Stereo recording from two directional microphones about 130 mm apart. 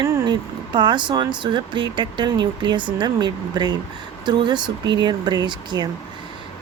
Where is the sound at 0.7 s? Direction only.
35° right (ahead or behind).